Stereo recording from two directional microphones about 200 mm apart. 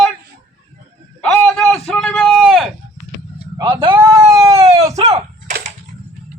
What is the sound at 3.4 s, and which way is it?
Vehicle, 25° right (ahead or behind).